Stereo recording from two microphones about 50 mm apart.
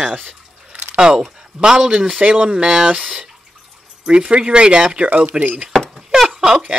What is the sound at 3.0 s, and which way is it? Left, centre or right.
Speech, right.